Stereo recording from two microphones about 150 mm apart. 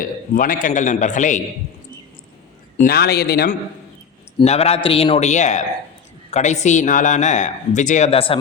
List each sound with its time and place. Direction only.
0.0 s a man's voice: 65° left (ahead or behind)
2.8 s a man's voice: 90° left
4.4 s a man's voice: 45° left (ahead or behind)